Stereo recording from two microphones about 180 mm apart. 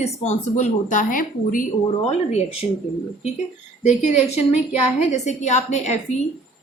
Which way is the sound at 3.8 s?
40° left (ahead or behind).